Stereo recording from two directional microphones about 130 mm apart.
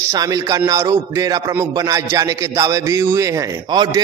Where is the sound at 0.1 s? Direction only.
25° right (ahead or behind).